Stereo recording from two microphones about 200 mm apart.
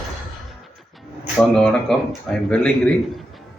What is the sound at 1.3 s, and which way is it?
Speech, centre (ahead or behind).